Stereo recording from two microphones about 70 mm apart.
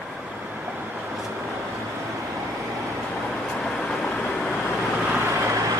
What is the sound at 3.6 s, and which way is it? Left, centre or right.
Vehicle, centre.